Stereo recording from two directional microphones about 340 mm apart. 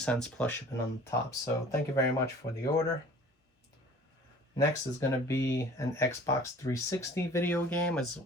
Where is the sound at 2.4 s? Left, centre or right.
Centre.